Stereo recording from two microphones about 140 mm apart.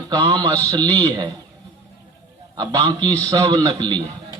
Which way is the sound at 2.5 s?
30° right (ahead or behind).